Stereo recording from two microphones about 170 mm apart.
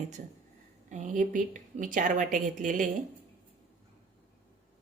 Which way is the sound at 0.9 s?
45° right (ahead or behind).